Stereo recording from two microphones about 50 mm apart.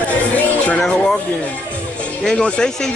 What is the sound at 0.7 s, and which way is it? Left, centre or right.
Music, centre.